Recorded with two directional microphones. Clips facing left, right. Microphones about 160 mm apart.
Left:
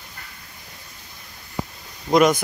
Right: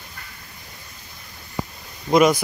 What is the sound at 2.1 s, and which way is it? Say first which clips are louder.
Speech: even; centre (ahead or behind).